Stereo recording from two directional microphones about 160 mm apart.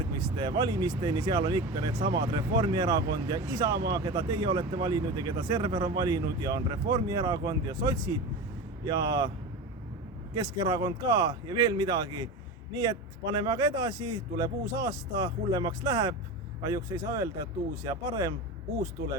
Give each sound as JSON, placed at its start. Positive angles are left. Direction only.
{"t": 0.0, "sound": "speech", "side_deg": -25}
{"t": 10.3, "sound": "speech", "side_deg": -25}